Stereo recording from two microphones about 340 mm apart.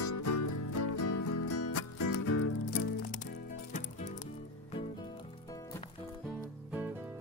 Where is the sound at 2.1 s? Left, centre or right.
Left.